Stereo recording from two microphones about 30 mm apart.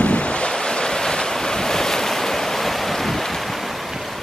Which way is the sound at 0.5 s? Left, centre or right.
Left.